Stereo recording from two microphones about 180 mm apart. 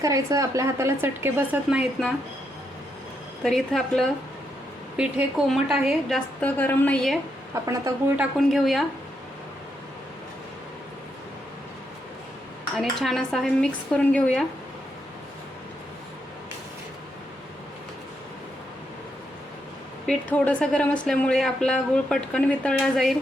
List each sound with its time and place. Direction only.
0.0 s a woman's voice: 20° right (ahead or behind)
3.4 s speech: centre (ahead or behind)
7.5 s a woman's voice: 15° right (ahead or behind)
8.2 s speech: centre (ahead or behind)
12.7 s speech: centre (ahead or behind)
20.1 s speech: 5° left (ahead or behind)